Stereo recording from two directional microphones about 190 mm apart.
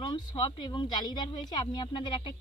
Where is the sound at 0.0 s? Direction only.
25° left (ahead or behind).